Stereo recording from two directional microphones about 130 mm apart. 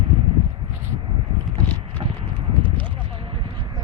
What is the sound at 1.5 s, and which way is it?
Clip-clop, 15° left (ahead or behind).